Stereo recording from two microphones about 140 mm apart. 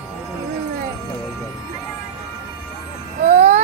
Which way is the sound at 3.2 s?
55° right (ahead or behind).